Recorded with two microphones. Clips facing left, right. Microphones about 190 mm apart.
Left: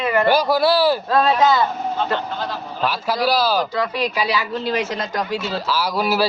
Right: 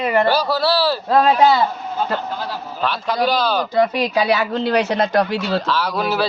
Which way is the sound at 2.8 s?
5° left (ahead or behind).